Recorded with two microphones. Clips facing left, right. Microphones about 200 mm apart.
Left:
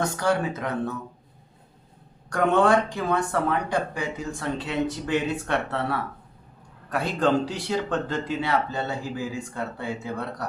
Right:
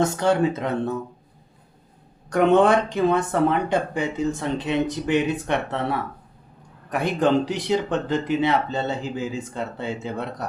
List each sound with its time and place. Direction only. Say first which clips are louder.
0.0 s speech: right 5 dB; 25° right (ahead or behind)
2.3 s speech: right 3 dB; 20° right (ahead or behind)